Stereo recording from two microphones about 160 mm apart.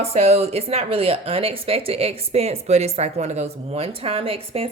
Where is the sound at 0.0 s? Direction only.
40° right (ahead or behind).